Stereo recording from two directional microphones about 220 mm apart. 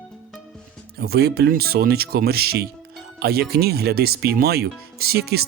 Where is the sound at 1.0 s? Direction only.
45° right (ahead or behind).